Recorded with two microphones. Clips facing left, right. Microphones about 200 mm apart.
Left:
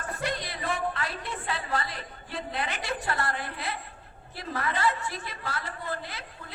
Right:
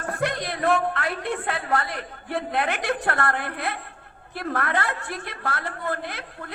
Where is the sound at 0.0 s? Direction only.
55° right (ahead or behind).